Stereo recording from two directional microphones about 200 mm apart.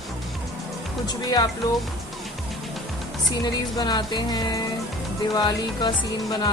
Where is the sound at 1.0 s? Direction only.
20° left (ahead or behind).